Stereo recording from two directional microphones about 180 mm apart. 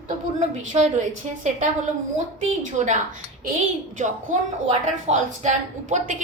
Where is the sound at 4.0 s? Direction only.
40° right (ahead or behind).